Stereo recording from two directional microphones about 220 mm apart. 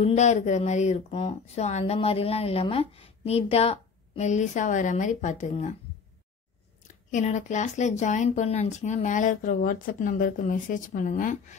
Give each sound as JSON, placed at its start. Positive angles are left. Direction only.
{"t": 0.0, "sound": "speech", "side_deg": 30}
{"t": 7.1, "sound": "speech", "side_deg": 35}